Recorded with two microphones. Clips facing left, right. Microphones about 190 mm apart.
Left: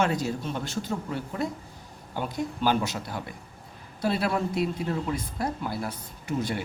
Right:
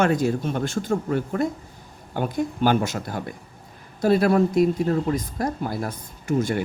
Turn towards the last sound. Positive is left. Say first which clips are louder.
# right 6 dB
turn(degrees=-45)  # may be behind; listen again after turning